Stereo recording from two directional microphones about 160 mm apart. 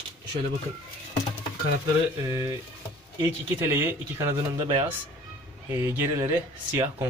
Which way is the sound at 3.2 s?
15° right (ahead or behind).